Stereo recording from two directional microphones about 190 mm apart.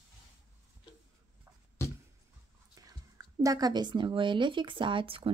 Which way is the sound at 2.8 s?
20° right (ahead or behind).